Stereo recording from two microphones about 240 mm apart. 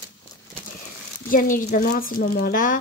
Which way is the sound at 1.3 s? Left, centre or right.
Left.